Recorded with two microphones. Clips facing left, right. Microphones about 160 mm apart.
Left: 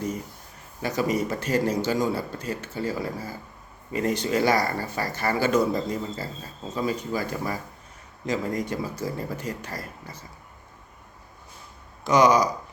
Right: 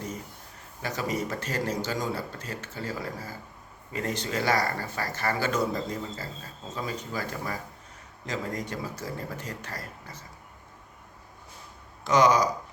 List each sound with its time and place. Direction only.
0.8 s speech: 10° left (ahead or behind)
3.9 s speech: 10° left (ahead or behind)
12.0 s speech: 10° left (ahead or behind)